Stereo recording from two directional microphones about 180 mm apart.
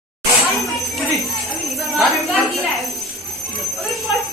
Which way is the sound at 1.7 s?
Centre (ahead or behind).